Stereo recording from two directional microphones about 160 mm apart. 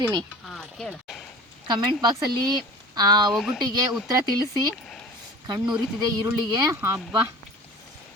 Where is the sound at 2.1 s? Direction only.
25° right (ahead or behind).